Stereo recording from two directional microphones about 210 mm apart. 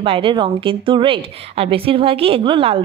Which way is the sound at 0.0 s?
25° right (ahead or behind).